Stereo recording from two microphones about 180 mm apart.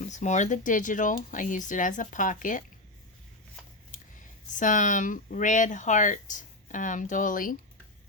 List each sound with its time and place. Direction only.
0.1 s speech: 40° left (ahead or behind)
4.5 s speech: 45° left (ahead or behind)